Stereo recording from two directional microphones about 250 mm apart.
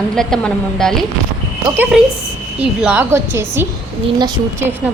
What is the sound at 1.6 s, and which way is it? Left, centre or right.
A woman's voice, centre.